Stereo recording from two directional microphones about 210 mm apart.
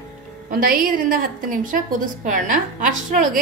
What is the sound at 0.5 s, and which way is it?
A woman's voice, 45° right (ahead or behind).